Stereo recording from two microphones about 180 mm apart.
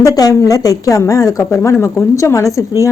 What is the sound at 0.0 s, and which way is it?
A woman's voice, 20° left (ahead or behind).